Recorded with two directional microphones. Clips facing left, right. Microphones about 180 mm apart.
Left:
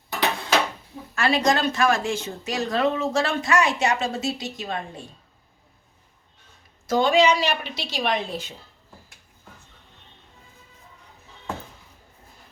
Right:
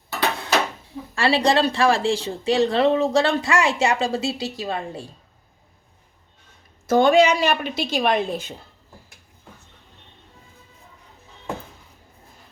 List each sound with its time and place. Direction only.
1.1 s a woman's voice: 30° right (ahead or behind)
6.8 s a woman's voice: 50° right (ahead or behind)